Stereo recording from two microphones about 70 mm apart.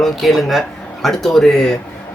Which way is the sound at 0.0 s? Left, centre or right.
Centre.